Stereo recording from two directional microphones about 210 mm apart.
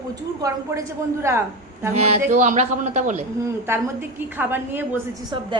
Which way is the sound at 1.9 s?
30° right (ahead or behind).